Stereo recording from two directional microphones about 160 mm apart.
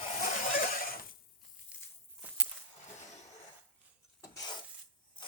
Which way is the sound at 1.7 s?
10° right (ahead or behind).